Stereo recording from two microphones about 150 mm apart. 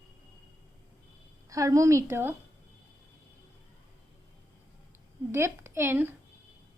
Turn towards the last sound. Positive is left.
turn(degrees=-15)  # may be behind; listen again after turning